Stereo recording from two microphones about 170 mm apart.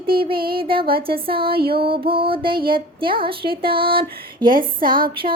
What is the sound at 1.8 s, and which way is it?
A woman's voice, 30° right (ahead or behind).